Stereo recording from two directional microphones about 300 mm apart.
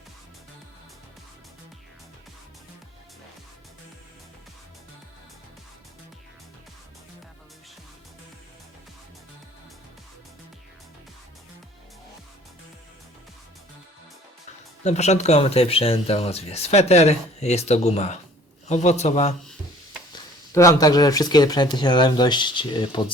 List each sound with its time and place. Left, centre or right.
14.8 s speech: left
20.1 s speech: centre